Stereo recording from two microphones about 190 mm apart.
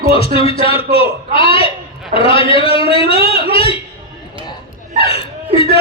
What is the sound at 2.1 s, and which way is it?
A man's voice, 30° left (ahead or behind).